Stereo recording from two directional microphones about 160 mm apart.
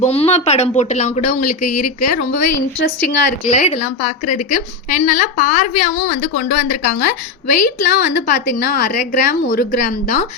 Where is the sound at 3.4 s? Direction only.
45° left (ahead or behind).